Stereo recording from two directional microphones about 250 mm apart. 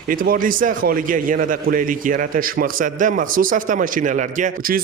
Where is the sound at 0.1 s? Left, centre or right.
Right.